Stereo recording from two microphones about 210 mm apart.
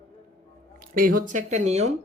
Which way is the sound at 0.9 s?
40° right (ahead or behind).